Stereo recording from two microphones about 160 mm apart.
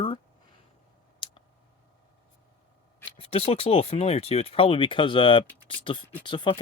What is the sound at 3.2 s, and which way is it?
Speech, 40° left (ahead or behind).